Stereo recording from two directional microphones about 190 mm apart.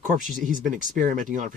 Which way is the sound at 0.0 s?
45° right (ahead or behind).